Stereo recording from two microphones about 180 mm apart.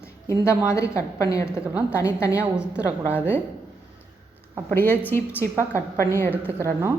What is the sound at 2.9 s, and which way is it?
Speech, 15° left (ahead or behind).